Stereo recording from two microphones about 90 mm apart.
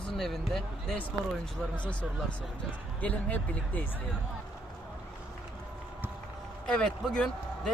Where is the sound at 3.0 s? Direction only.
15° left (ahead or behind).